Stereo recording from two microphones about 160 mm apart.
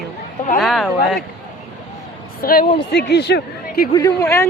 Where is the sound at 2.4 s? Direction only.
65° left (ahead or behind).